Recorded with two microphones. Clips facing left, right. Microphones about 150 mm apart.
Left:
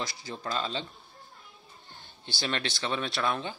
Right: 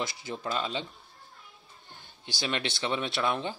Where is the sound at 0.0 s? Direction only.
20° right (ahead or behind).